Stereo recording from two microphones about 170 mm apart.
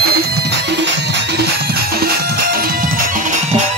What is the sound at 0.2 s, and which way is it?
Music, 75° right (ahead or behind).